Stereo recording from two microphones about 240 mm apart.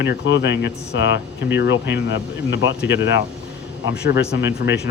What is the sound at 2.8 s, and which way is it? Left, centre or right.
Speech, centre.